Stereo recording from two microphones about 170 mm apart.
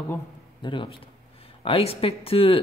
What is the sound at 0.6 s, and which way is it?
A man's voice, 30° left (ahead or behind).